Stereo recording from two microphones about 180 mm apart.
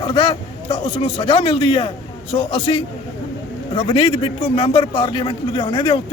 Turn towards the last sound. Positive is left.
turn(degrees=25)  # may be behind; listen again after turning